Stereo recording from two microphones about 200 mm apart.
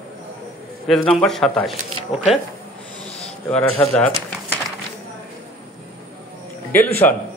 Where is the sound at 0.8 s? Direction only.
Centre (ahead or behind).